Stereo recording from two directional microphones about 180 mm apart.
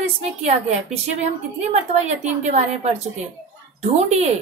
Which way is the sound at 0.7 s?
40° right (ahead or behind).